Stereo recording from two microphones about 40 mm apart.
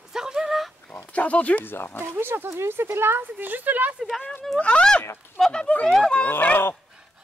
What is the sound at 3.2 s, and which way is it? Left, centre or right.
Speech, right.